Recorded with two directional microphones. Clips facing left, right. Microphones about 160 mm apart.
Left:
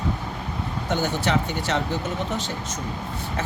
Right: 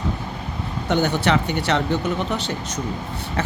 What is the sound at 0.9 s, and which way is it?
Speech, 65° right (ahead or behind).